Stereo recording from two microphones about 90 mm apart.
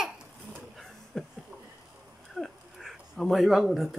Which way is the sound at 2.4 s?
Centre (ahead or behind).